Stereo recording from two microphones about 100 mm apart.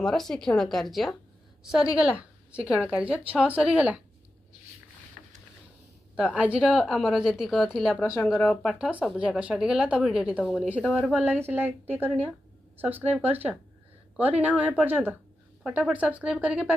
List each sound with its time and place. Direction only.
0.0 s a woman's voice: 5° left (ahead or behind); by 4.0 s 10° right (ahead or behind)
6.4 s a woman's voice: 10° right (ahead or behind)
6.7 s a woman's voice: centre (ahead or behind)
11.1 s a woman's voice: 20° right (ahead or behind)